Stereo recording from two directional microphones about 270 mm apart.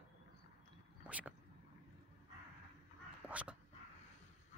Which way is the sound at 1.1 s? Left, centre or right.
Centre.